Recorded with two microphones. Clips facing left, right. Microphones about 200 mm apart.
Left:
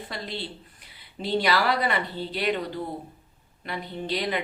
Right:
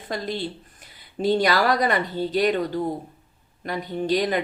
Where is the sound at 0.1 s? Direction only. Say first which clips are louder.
Right 9 dB; 45° right (ahead or behind).